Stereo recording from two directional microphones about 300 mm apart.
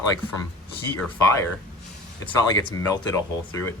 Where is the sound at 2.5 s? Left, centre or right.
Centre.